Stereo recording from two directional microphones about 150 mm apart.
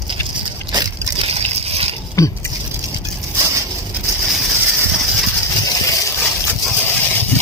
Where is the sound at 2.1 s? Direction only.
20° left (ahead or behind).